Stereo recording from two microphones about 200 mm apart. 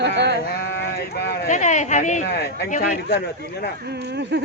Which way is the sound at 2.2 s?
55° left (ahead or behind).